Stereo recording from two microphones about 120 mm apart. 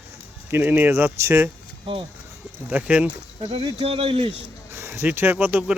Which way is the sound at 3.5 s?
50° right (ahead or behind).